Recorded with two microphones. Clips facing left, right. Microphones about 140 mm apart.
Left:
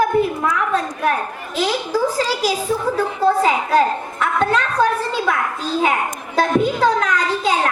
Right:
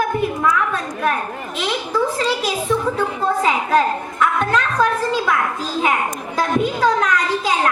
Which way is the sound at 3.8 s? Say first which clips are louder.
Even; 30° left (ahead or behind).